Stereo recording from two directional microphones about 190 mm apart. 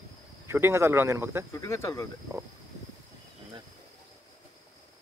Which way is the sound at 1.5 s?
15° left (ahead or behind).